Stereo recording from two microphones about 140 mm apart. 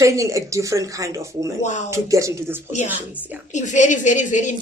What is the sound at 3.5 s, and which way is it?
A woman's voice, 60° left (ahead or behind).